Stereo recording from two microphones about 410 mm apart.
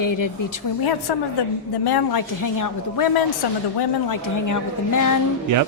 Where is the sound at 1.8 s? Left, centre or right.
Left.